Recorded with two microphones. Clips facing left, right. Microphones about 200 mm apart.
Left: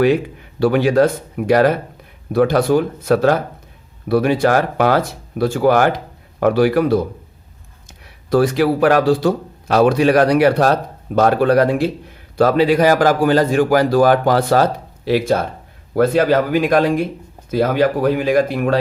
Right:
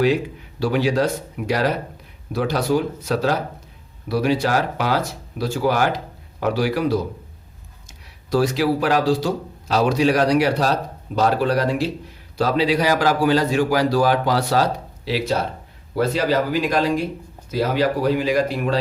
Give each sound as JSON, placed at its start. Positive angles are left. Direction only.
{"t": 0.6, "sound": "speech", "side_deg": 55}